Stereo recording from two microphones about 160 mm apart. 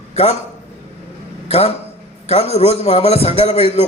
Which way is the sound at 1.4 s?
40° left (ahead or behind).